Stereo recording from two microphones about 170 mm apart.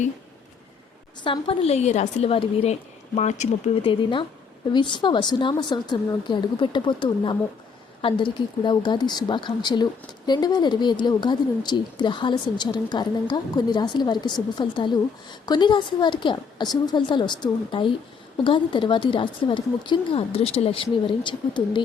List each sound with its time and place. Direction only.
1.2 s a woman's voice: 30° left (ahead or behind)
4.7 s a woman's voice: 25° left (ahead or behind)